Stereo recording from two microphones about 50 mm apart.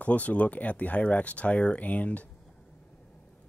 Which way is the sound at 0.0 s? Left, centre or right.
Left.